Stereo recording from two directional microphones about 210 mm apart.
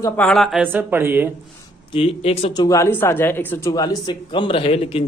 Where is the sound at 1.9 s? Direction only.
25° left (ahead or behind).